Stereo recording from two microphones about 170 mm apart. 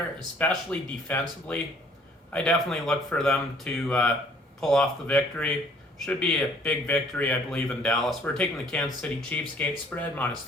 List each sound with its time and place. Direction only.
0.3 s speech: 10° left (ahead or behind)